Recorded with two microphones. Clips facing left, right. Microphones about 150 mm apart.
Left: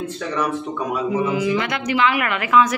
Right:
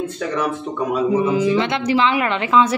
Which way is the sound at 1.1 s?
30° right (ahead or behind).